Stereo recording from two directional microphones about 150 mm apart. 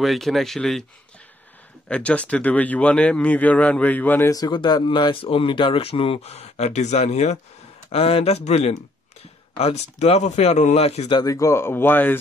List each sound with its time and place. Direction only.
0.0 s speech: centre (ahead or behind)
1.9 s speech: 10° left (ahead or behind)
4.3 s speech: 30° left (ahead or behind); by 11.1 s 45° left (ahead or behind)
11.1 s speech: 20° left (ahead or behind)